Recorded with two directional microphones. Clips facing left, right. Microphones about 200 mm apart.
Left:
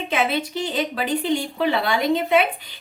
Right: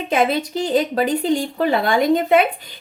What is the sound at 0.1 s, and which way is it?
A woman's voice, 45° right (ahead or behind).